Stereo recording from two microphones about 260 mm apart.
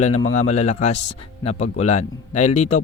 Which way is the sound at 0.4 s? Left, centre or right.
Left.